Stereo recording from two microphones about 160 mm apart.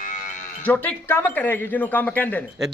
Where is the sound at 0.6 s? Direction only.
10° left (ahead or behind).